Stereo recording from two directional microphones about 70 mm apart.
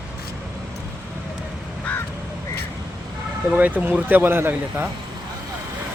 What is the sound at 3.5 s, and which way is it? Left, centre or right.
Speech, right.